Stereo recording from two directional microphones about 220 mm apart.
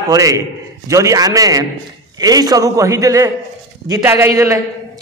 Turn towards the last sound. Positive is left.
turn(degrees=-15)  # may be behind; listen again after turning